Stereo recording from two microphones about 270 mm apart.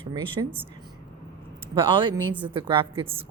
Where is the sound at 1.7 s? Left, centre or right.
Centre.